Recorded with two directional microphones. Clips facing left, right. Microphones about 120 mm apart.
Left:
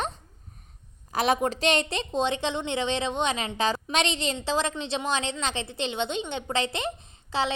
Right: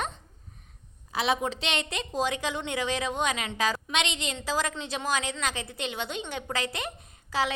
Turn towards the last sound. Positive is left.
turn(degrees=25)  # may be behind; listen again after turning